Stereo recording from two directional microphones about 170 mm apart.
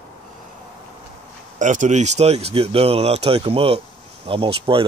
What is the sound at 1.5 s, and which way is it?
Speech, 45° right (ahead or behind).